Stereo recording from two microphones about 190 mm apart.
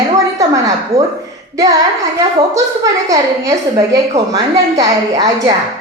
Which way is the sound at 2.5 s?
20° right (ahead or behind).